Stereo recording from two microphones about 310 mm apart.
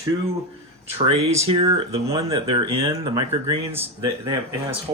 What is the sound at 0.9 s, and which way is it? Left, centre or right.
Speech, centre.